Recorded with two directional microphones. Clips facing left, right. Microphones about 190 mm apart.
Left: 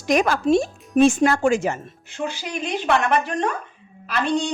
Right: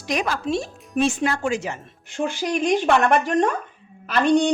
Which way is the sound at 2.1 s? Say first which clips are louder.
Right 4 dB; 50° right (ahead or behind).